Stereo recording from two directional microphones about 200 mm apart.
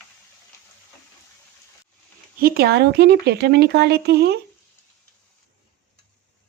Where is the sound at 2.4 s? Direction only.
50° right (ahead or behind).